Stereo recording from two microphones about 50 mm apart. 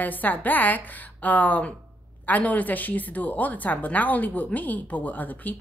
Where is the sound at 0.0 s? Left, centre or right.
Left.